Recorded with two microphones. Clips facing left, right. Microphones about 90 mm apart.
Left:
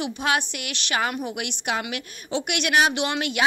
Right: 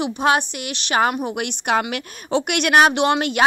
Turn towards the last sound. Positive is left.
turn(degrees=-40)  # may be behind; listen again after turning